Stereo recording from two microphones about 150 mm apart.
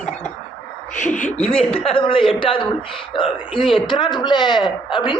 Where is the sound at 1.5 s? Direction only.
40° left (ahead or behind).